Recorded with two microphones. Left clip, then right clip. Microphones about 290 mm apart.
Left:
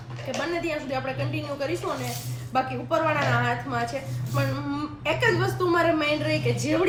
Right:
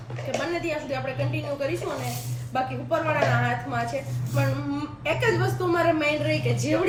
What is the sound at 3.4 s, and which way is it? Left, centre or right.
Speech, centre.